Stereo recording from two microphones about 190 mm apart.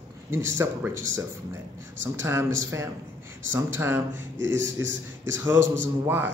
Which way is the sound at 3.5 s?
15° right (ahead or behind).